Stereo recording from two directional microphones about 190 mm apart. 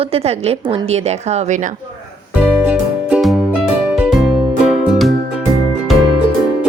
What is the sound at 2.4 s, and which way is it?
Music, 5° right (ahead or behind).